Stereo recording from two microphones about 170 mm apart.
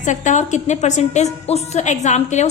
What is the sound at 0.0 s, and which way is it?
A woman's voice, 45° left (ahead or behind).